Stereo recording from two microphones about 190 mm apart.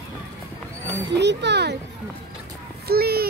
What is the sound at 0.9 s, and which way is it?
Speech, 65° right (ahead or behind).